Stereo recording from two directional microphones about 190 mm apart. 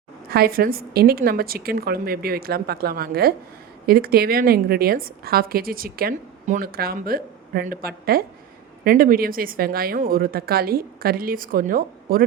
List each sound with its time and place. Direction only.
0.3 s a woman's voice: 50° right (ahead or behind)